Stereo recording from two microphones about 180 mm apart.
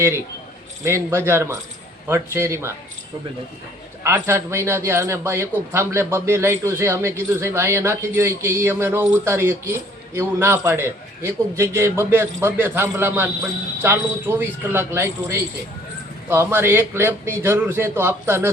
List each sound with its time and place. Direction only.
0.9 s speech: 15° right (ahead or behind)
4.0 s speech: 15° right (ahead or behind)